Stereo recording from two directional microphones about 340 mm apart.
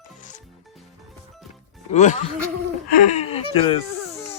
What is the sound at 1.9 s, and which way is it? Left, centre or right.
Music, left.